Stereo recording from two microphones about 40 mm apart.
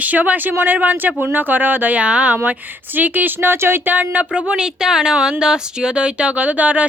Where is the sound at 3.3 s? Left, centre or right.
Right.